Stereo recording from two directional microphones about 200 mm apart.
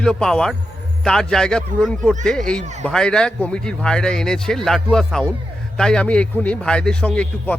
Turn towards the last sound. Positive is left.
turn(degrees=5)  # may be behind; listen again after turning